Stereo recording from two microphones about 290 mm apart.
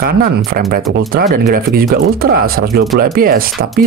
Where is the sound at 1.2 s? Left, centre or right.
Right.